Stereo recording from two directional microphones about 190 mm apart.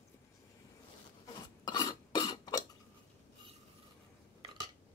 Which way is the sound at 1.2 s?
20° left (ahead or behind).